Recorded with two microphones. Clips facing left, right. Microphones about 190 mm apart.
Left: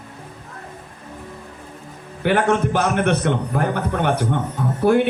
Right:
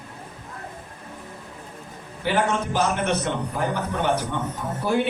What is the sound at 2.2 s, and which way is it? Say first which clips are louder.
A man's voice: left 5 dB; 55° left (ahead or behind).